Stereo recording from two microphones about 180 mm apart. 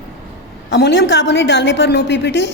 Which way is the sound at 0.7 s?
70° left (ahead or behind).